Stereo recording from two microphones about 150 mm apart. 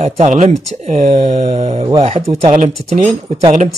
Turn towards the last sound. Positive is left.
turn(degrees=-50)  # may be behind; listen again after turning